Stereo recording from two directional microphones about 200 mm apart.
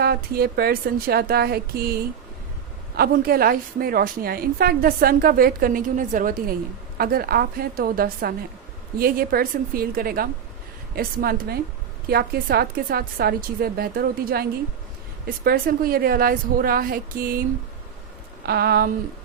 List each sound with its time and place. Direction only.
0.0 s a woman's voice: 50° right (ahead or behind)
15.4 s a woman's voice: 45° right (ahead or behind)
18.4 s a woman's voice: 50° right (ahead or behind)